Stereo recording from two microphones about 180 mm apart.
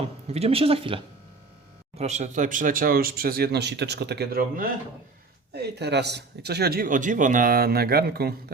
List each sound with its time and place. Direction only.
0.0 s speech: 35° right (ahead or behind); by 4.7 s 55° right (ahead or behind)
5.5 s speech: 70° right (ahead or behind)